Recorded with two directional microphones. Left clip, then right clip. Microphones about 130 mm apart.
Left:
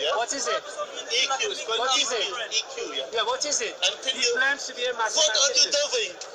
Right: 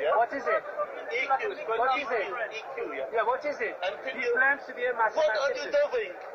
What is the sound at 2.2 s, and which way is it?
Speech, 50° left (ahead or behind).